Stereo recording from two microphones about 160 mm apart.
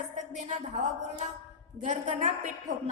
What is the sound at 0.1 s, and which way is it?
A woman's voice, 50° right (ahead or behind).